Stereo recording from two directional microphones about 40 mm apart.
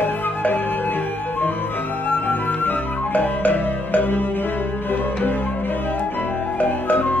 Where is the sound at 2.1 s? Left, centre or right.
Left.